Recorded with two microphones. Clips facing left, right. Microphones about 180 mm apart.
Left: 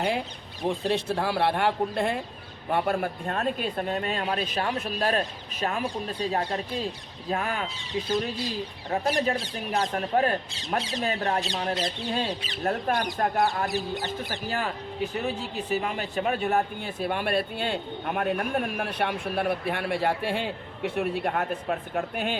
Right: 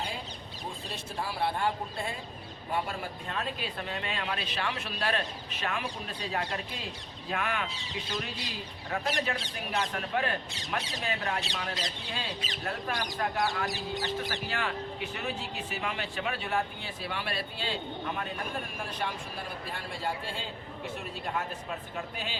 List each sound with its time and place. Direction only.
0.6 s speech: 75° left (ahead or behind)
2.6 s speech: 60° left (ahead or behind); by 7.7 s 35° left (ahead or behind)
9.0 s a man's voice: 45° left (ahead or behind)